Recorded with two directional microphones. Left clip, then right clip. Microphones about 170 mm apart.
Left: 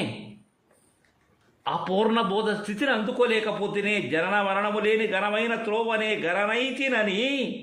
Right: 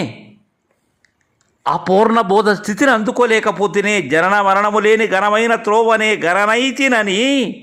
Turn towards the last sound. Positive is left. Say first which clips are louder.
# right 10 dB
turn(degrees=-40)  # may be behind; listen again after turning